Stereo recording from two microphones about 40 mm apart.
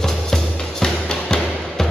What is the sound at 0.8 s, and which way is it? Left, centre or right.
Music, centre.